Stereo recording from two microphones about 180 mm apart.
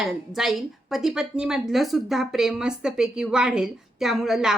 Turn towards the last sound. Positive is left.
turn(degrees=0)  # may be behind; listen again after turning